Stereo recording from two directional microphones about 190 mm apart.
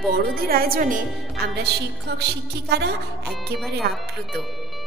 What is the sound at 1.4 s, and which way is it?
Speech, 60° right (ahead or behind).